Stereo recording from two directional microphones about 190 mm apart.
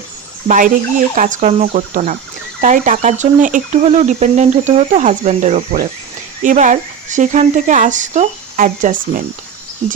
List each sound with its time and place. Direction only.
0.4 s speech: 45° right (ahead or behind)